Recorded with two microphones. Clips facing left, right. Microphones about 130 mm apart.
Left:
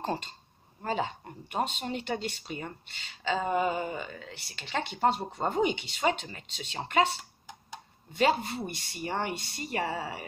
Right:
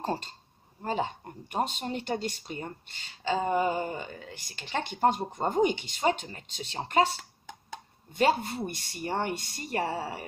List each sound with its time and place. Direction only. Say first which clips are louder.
0.0 s speech: right 1 dB; 40° right (ahead or behind)